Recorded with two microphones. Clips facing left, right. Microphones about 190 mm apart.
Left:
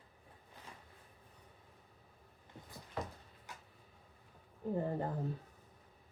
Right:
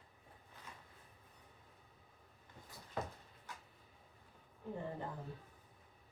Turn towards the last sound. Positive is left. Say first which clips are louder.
# left 7 dB
turn(degrees=40)  # may be behind; listen again after turning